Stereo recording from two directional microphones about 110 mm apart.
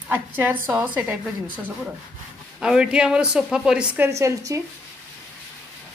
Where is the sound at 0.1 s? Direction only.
20° right (ahead or behind).